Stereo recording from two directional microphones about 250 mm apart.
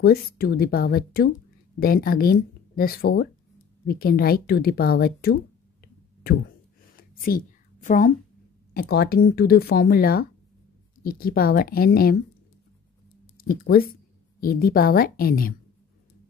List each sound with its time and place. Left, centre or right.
0.0 s speech: left
7.0 s a sound: left
8.9 s speech: left
13.4 s speech: left